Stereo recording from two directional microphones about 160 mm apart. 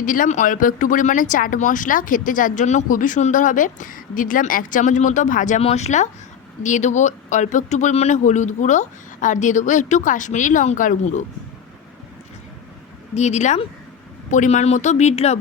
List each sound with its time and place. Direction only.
0.0 s speech: 55° left (ahead or behind)
13.1 s speech: 45° left (ahead or behind)